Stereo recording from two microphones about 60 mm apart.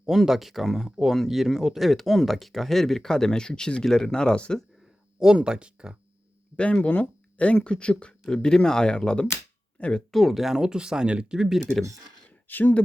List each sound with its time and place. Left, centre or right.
0.0 s speech: centre
5.2 s speech: centre
6.6 s speech: centre
10.1 s speech: centre
12.5 s speech: left